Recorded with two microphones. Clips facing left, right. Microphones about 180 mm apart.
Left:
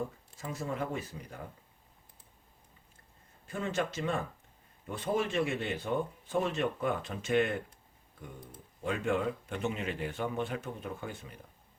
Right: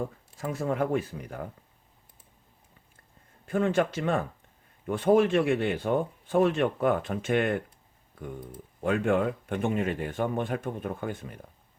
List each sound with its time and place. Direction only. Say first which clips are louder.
0.3 s speech: right 7 dB; 55° right (ahead or behind)
3.4 s speech: right 9 dB; 55° right (ahead or behind)
8.8 s speech: right 6 dB; 60° right (ahead or behind)